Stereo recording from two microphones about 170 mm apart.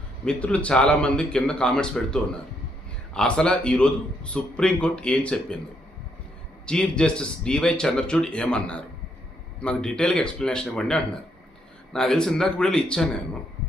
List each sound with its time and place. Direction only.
0.3 s a man's voice: 5° left (ahead or behind)
6.7 s a man's voice: 5° left (ahead or behind)